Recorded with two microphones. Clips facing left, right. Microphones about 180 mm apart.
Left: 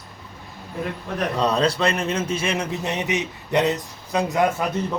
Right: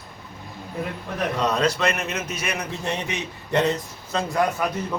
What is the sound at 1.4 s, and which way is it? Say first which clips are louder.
A man's voice: left 2 dB; 30° left (ahead or behind).